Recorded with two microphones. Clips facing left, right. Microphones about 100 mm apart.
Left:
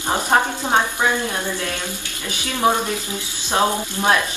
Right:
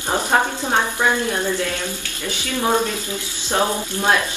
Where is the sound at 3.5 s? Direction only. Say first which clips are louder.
Left 1 dB; 15° left (ahead or behind).